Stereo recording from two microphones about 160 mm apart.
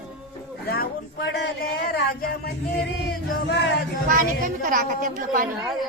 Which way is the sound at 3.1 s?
90° left.